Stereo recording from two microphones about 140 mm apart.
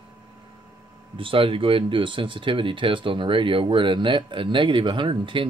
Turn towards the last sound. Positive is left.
turn(degrees=-35)  # may be behind; listen again after turning